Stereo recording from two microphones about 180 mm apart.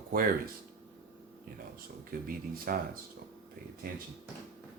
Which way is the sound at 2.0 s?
55° right (ahead or behind).